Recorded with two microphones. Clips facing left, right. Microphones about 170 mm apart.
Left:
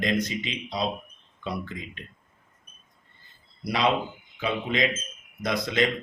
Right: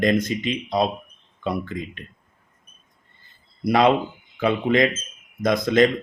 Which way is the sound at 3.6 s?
50° right (ahead or behind).